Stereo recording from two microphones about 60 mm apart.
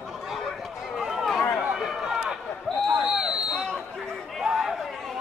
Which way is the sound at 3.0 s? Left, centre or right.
Centre.